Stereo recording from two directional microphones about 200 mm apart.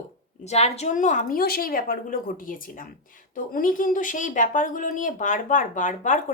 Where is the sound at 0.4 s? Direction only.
35° left (ahead or behind).